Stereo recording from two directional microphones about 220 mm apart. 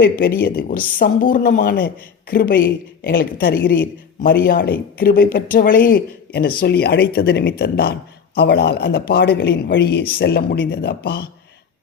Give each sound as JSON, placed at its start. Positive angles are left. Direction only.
{"t": 0.0, "sound": "speech", "side_deg": 45}